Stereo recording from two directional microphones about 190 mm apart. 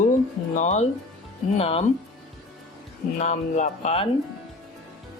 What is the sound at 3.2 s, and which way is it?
Speech, 40° left (ahead or behind).